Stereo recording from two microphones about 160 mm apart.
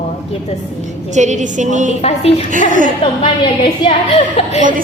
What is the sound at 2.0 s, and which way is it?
Speech, 40° left (ahead or behind).